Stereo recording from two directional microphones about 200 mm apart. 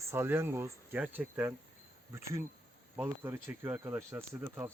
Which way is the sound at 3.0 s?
10° right (ahead or behind).